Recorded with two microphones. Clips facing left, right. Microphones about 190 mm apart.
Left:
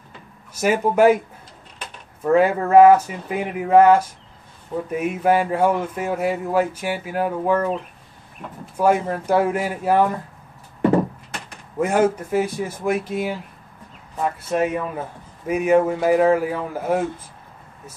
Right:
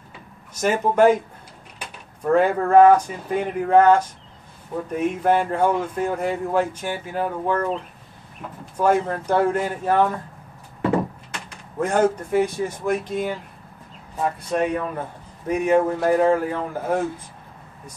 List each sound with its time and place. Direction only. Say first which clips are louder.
0.6 s speech: left 1 dB; 10° left (ahead or behind)
2.2 s speech: left 1 dB; 5° left (ahead or behind)
11.8 s speech: left 1 dB; 10° left (ahead or behind)